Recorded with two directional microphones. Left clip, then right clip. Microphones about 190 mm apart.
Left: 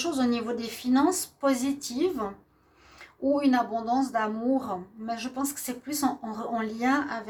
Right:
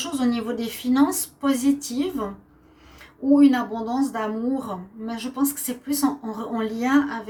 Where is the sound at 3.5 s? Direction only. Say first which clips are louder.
Even; 45° left (ahead or behind).